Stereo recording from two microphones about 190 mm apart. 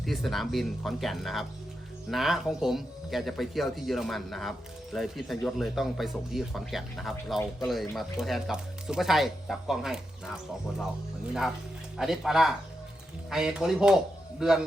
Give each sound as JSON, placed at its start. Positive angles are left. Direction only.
{"t": 0.0, "sound": "speech", "side_deg": 0}
{"t": 11.9, "sound": "speech", "side_deg": 0}